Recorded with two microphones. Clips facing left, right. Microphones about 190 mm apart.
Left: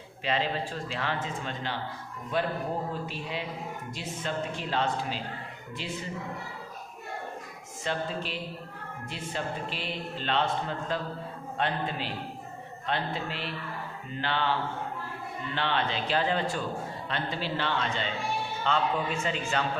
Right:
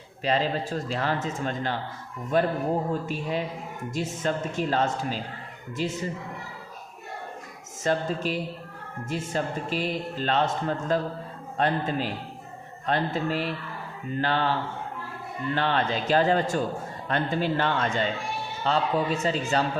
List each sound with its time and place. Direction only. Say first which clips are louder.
0.3 s a man's voice: right 4 dB; 40° right (ahead or behind)
7.9 s a man's voice: right 6 dB; 45° right (ahead or behind)
15.5 s a man's voice: right 4 dB; 45° right (ahead or behind)
18.6 s speech: right 4 dB; 35° right (ahead or behind)